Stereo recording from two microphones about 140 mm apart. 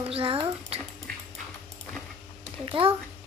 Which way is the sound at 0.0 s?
40° right (ahead or behind).